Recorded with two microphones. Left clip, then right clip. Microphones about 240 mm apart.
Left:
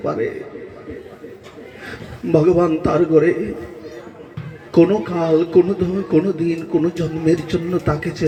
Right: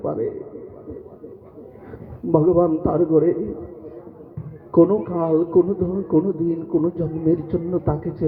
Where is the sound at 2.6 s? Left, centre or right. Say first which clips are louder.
Left 3 dB; left.